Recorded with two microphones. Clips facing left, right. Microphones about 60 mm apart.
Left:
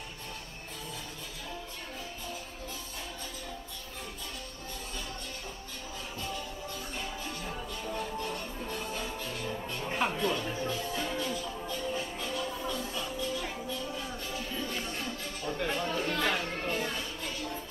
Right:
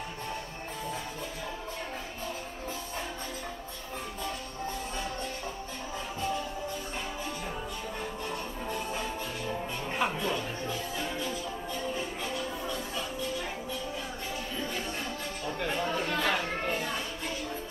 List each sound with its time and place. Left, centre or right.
7.4 s music: centre
14.3 s music: centre
14.9 s music: centre
15.4 s chatter: centre
16.6 s music: centre